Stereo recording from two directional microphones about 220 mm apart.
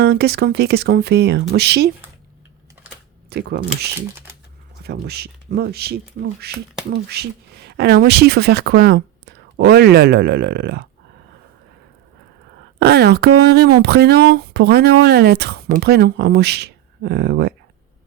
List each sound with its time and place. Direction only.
0.0 s speech: 45° right (ahead or behind)
3.2 s speech: 50° right (ahead or behind)
4.8 s speech: 45° right (ahead or behind)
12.8 s speech: 45° right (ahead or behind)